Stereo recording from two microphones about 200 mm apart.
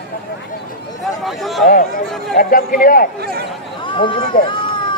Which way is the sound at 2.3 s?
45° left (ahead or behind).